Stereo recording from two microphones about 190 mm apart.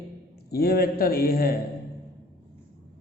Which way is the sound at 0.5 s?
55° left (ahead or behind).